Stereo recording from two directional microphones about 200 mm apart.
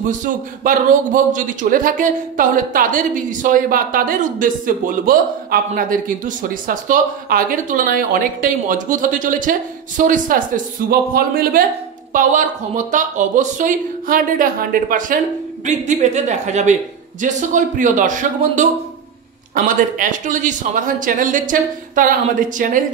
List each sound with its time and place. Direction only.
0.0 s a man's voice: 40° right (ahead or behind)